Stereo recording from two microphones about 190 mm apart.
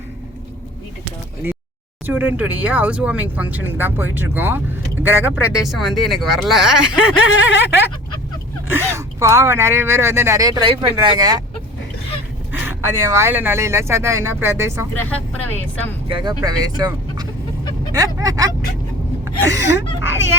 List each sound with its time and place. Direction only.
1.4 s a sound: 10° right (ahead or behind)
2.0 s speech: 10° right (ahead or behind)
7.5 s speech: 65° left (ahead or behind)
8.7 s speech: 15° right (ahead or behind)
12.5 s speech: 15° right (ahead or behind)
14.9 s speech: 10° left (ahead or behind)
16.0 s speech: 25° right (ahead or behind)
19.2 s a sound: 15° right (ahead or behind)
20.1 s speech: 15° right (ahead or behind)